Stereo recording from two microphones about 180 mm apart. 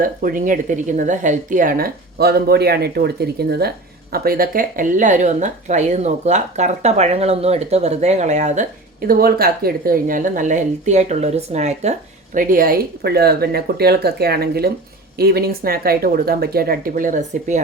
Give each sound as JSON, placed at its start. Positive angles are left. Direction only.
{"t": 0.0, "sound": "a woman's voice", "side_deg": -50}